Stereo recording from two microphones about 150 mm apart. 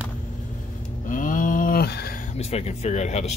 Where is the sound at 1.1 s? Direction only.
60° left (ahead or behind); by 2.2 s 90° left.